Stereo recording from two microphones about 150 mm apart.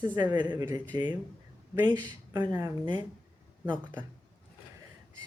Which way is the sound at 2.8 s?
30° right (ahead or behind).